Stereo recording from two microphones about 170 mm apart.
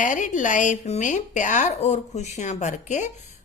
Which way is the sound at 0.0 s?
50° left (ahead or behind).